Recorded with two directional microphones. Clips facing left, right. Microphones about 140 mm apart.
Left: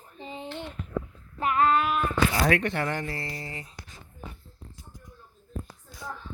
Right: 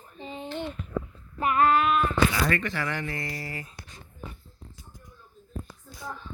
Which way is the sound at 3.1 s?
30° left (ahead or behind).